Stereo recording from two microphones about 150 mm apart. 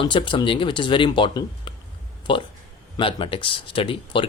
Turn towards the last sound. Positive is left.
turn(degrees=35)  # may be behind; listen again after turning